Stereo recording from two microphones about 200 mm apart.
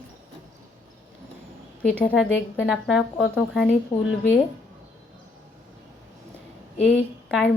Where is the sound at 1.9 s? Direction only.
5° left (ahead or behind).